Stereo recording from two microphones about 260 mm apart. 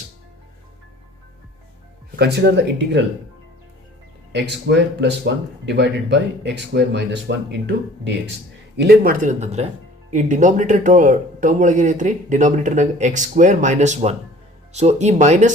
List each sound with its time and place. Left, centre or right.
2.1 s speech: right
4.3 s speech: right